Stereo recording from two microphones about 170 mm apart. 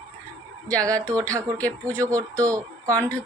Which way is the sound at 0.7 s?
20° right (ahead or behind).